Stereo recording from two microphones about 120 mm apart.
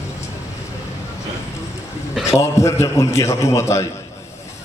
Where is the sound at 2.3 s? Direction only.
25° left (ahead or behind).